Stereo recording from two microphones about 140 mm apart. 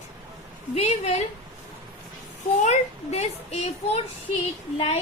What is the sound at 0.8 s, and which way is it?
Speech, 50° left (ahead or behind).